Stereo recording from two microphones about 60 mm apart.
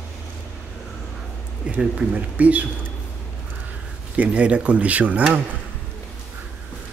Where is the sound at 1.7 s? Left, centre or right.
Centre.